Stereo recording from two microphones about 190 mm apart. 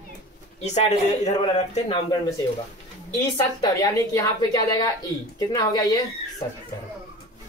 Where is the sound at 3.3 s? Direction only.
20° left (ahead or behind).